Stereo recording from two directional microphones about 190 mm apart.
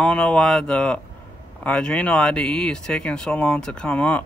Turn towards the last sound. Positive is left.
turn(degrees=5)  # may be behind; listen again after turning